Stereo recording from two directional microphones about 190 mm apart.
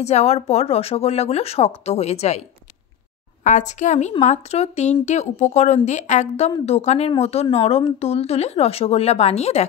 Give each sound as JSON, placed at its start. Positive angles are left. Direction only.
{"t": 0.0, "sound": "speech", "side_deg": 35}
{"t": 3.4, "sound": "speech", "side_deg": 40}